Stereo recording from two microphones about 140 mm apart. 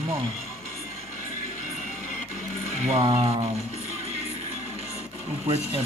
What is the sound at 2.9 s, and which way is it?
Speech, 40° right (ahead or behind).